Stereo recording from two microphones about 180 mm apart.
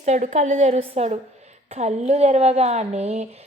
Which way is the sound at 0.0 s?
40° right (ahead or behind).